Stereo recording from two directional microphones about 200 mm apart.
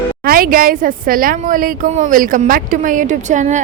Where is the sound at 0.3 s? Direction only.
45° right (ahead or behind).